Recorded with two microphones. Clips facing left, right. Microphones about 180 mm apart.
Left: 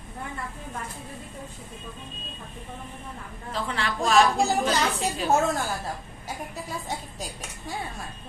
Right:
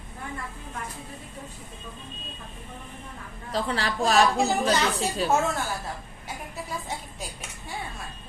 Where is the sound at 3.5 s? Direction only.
35° right (ahead or behind).